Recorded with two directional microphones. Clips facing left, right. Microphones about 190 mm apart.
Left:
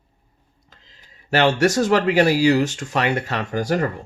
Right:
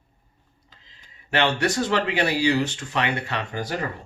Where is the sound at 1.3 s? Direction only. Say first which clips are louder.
Left 5 dB; 40° left (ahead or behind).